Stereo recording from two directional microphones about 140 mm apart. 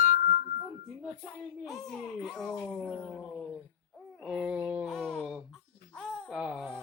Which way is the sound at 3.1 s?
10° left (ahead or behind).